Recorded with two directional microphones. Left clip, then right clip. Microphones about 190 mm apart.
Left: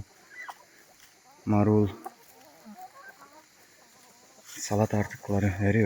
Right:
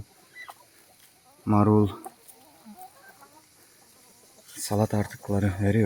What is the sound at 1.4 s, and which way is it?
Speech, 15° right (ahead or behind).